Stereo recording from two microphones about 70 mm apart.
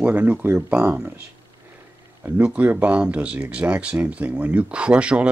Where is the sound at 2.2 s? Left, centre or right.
Right.